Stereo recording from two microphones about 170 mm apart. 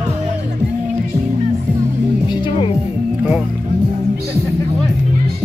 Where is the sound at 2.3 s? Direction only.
25° left (ahead or behind).